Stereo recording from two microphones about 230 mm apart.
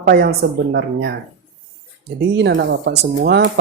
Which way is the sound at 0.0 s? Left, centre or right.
Right.